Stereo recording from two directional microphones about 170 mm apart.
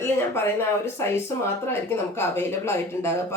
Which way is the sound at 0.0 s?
15° left (ahead or behind).